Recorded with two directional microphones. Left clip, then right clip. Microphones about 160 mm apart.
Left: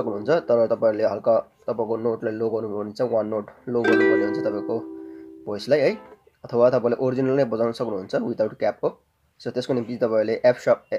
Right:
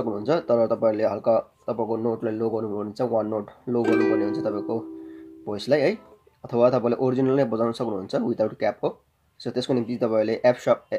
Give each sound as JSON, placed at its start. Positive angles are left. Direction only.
{"t": 0.0, "sound": "speech", "side_deg": 0}
{"t": 3.8, "sound": "speech", "side_deg": 30}
{"t": 4.4, "sound": "speech", "side_deg": 0}